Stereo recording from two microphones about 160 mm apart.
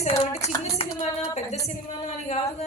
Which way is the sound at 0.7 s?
40° left (ahead or behind).